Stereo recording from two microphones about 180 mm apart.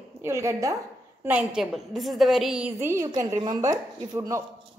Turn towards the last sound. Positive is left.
turn(degrees=-15)  # may be behind; listen again after turning